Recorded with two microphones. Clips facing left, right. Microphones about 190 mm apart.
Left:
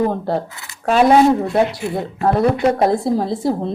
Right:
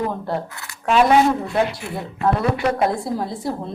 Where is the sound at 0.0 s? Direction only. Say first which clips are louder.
Left 5 dB; 35° left (ahead or behind).